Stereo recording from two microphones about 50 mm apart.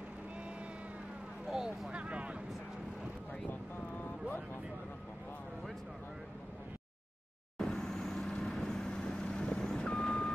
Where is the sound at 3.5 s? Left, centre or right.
Left.